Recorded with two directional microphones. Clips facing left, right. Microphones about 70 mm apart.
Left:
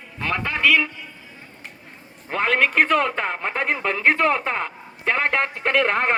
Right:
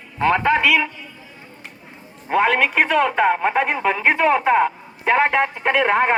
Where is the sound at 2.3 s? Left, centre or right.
Centre.